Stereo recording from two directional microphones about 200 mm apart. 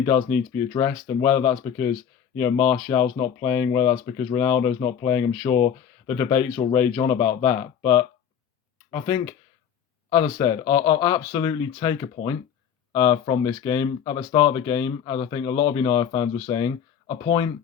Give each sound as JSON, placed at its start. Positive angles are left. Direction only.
{"t": 0.0, "sound": "speech", "side_deg": 10}
{"t": 4.0, "sound": "speech", "side_deg": 25}
{"t": 4.4, "sound": "speech", "side_deg": 10}